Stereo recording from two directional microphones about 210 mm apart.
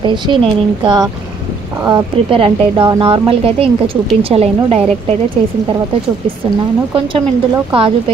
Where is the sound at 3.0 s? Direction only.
25° right (ahead or behind).